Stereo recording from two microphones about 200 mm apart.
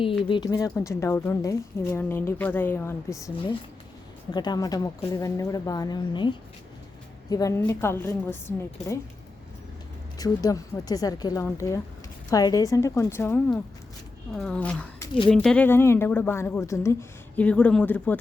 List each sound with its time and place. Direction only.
0.0 s a woman's voice: 25° left (ahead or behind)
10.2 s a woman's voice: 20° left (ahead or behind)